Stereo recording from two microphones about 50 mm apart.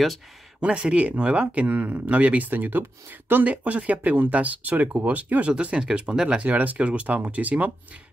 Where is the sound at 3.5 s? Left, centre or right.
Right.